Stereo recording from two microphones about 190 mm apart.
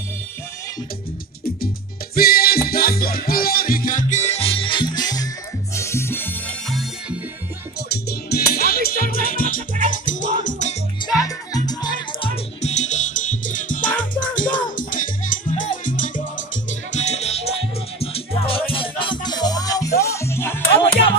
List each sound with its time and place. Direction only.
2.1 s music: 50° left (ahead or behind); by 6.3 s 10° left (ahead or behind)
6.7 s music: centre (ahead or behind)
7.9 s music: 55° left (ahead or behind); by 10.8 s 40° left (ahead or behind)
11.1 s music: 20° left (ahead or behind)
12.6 s music: 40° left (ahead or behind); by 20.6 s 10° left (ahead or behind)